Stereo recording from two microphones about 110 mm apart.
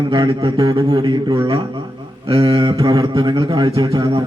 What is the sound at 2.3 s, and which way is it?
A man's voice, 55° right (ahead or behind).